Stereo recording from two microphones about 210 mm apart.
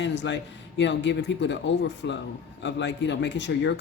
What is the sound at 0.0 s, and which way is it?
A man's voice, 60° left (ahead or behind).